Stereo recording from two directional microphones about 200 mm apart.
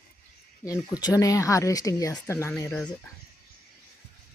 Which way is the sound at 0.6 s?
15° left (ahead or behind).